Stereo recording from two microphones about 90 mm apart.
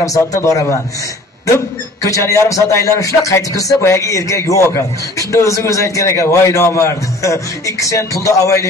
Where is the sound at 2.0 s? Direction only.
35° left (ahead or behind).